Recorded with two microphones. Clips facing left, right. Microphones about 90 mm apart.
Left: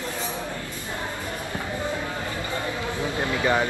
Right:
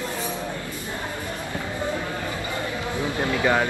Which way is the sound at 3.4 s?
20° right (ahead or behind).